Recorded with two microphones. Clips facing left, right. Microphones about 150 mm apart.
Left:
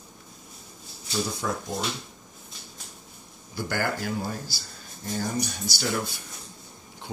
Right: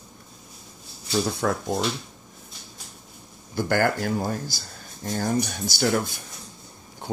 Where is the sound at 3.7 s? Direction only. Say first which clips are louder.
Right 6 dB; 50° right (ahead or behind).